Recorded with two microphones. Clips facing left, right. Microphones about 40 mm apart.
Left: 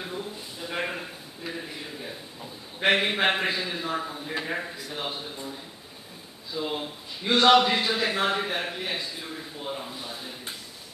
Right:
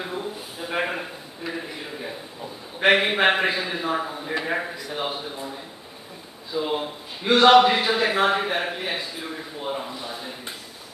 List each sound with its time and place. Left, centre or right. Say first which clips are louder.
0.0 s a sound: right 4 dB; right
4.9 s a man's voice: right 5 dB; centre
6.5 s a man's voice: right 5 dB; centre